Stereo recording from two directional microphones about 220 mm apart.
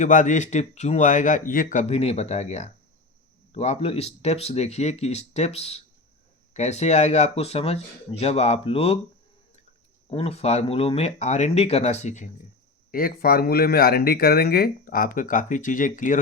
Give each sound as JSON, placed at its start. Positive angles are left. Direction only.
{"t": 0.0, "sound": "speech", "side_deg": 35}
{"t": 10.1, "sound": "speech", "side_deg": 25}